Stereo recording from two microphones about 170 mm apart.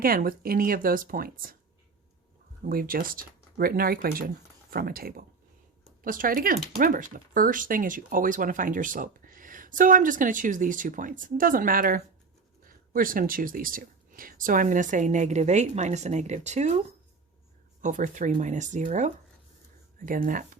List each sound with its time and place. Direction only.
0.0 s speech: 60° right (ahead or behind)
2.6 s speech: 60° right (ahead or behind)
17.8 s speech: 50° right (ahead or behind)